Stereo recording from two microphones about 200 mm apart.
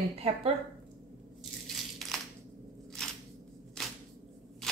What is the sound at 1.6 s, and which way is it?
Crushing, centre (ahead or behind).